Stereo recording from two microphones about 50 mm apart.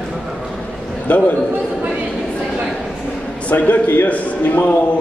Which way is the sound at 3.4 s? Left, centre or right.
Left.